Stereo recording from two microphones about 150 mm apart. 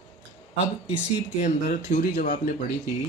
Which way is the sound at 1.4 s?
50° left (ahead or behind).